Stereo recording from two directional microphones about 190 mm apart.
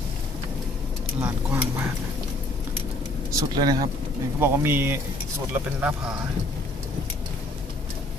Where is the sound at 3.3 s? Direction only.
20° right (ahead or behind).